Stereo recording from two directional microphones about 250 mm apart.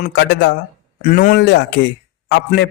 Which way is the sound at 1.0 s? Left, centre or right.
Left.